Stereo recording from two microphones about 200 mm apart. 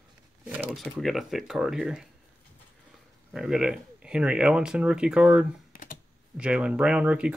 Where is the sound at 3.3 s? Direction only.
5° right (ahead or behind).